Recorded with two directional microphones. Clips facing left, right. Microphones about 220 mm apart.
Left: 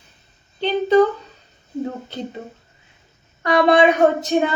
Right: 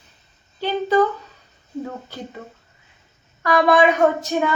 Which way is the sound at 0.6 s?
20° left (ahead or behind).